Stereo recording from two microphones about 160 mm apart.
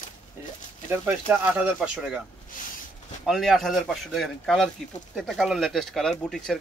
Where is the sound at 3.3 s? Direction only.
Centre (ahead or behind).